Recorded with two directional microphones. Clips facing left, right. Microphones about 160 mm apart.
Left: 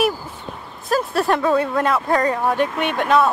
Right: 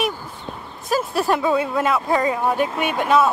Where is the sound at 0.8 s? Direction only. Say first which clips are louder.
Left 1 dB; centre (ahead or behind).